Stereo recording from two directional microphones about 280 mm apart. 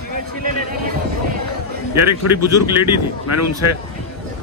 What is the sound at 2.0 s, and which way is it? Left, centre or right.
Speech, right.